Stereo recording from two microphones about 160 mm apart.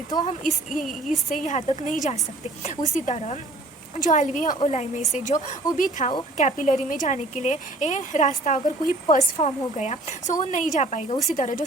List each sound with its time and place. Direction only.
0.3 s a woman's voice: 50° left (ahead or behind)